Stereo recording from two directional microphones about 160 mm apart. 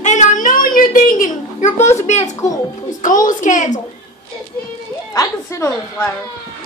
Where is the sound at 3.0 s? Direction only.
55° left (ahead or behind).